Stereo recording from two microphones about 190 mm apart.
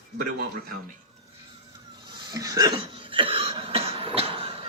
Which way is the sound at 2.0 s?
25° right (ahead or behind).